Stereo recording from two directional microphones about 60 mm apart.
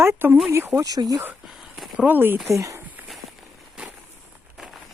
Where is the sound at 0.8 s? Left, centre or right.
Right.